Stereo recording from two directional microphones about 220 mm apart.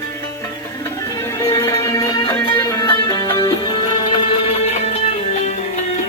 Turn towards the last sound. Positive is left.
turn(degrees=30)  # may be behind; listen again after turning